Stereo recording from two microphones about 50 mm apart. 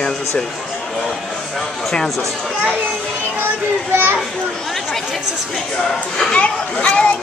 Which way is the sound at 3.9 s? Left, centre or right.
Right.